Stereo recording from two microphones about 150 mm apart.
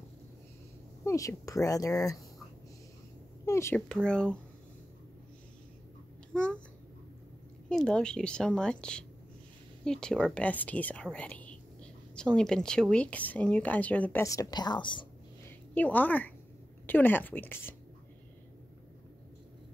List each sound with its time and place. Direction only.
1.0 s speech: 20° left (ahead or behind)
3.4 s speech: 20° left (ahead or behind)
3.9 s a woman's voice: 5° left (ahead or behind)
6.3 s speech: 5° left (ahead or behind)
7.7 s a woman's voice: 5° left (ahead or behind)
14.2 s speech: 25° left (ahead or behind)
15.7 s a woman's voice: 10° left (ahead or behind)